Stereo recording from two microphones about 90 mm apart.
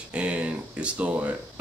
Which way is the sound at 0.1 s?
10° right (ahead or behind).